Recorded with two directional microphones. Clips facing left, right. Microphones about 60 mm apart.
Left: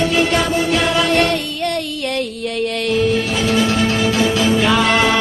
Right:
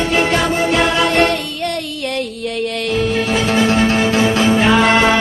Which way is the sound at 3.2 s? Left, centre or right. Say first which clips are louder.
Right 2 dB; right.